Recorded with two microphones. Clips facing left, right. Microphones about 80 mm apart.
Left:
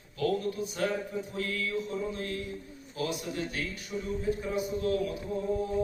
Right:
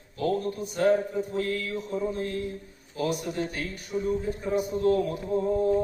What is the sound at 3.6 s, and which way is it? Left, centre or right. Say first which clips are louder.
Speech: right 6 dB; right.